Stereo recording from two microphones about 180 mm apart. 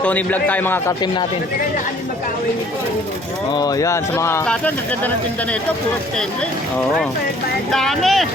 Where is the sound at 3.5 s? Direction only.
20° left (ahead or behind).